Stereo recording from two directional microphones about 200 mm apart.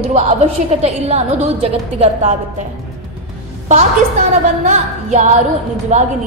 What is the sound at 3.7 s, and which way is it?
A woman's voice, 35° right (ahead or behind).